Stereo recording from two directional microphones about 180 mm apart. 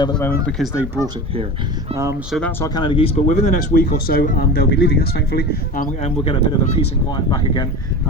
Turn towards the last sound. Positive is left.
turn(degrees=30)  # may be behind; listen again after turning